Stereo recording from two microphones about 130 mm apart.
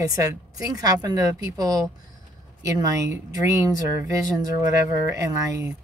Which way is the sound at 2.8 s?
25° right (ahead or behind).